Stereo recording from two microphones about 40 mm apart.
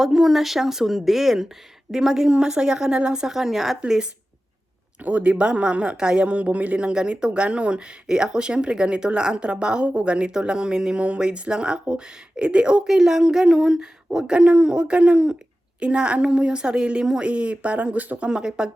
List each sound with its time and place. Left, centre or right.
0.0 s a woman's voice: centre
3.3 s speech: centre
3.8 s a woman's voice: centre
5.0 s speech: right
6.7 s speech: right
10.9 s speech: right
11.2 s speech: right
12.9 s speech: centre; by 18.2 s right
18.3 s speech: centre